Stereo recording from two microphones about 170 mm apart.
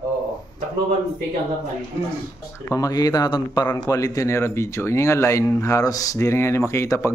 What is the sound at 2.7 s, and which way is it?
A man's voice, 20° left (ahead or behind).